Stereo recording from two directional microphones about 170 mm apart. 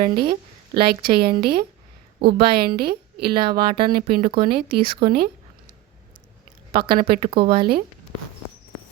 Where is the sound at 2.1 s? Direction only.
30° right (ahead or behind).